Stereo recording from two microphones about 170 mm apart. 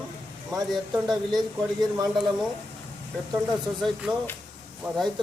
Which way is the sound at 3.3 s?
5° right (ahead or behind).